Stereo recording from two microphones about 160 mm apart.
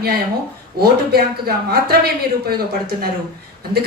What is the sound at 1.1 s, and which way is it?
Speech, 75° right (ahead or behind).